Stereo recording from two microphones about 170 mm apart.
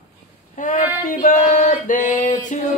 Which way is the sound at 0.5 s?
50° left (ahead or behind).